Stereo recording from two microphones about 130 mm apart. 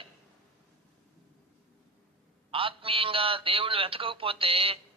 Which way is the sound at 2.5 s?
45° right (ahead or behind).